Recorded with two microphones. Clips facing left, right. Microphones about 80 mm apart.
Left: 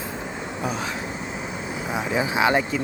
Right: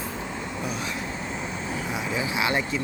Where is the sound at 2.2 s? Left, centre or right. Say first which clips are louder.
Left 6 dB; left.